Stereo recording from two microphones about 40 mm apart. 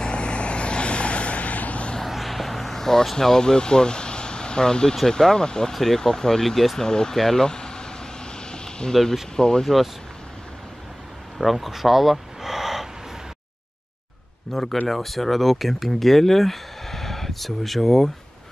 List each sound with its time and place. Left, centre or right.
0.0 s vehicle: left
2.0 s vehicle: centre
5.0 s speech: centre
6.8 s speech: centre
7.4 s vehicle: centre
8.5 s a sound: centre
8.9 s speech: centre
9.4 s speech: centre
11.3 s speech: centre
14.5 s speech: centre